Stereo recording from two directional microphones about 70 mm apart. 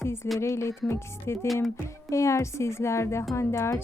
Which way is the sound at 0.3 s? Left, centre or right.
Left.